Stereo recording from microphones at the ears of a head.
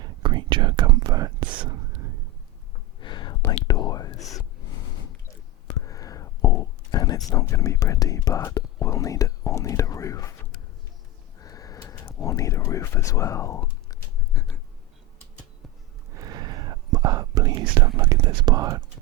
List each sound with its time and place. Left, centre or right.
0.0 s whispering: right
3.0 s whispering: left
5.6 s speech: left
16.1 s speech: right